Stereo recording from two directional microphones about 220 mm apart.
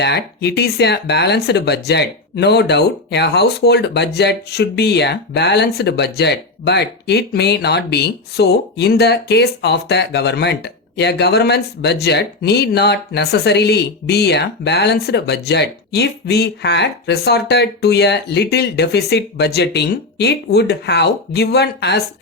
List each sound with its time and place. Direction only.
0.0 s speech: 50° left (ahead or behind)